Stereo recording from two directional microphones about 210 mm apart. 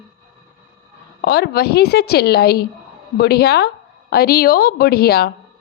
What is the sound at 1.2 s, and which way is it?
A woman's voice, 50° left (ahead or behind).